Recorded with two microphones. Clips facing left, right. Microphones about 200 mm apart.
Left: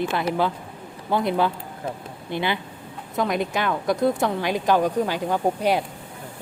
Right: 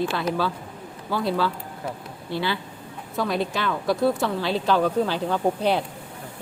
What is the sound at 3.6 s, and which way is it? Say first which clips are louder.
Speech: left 1 dB; 50° left (ahead or behind).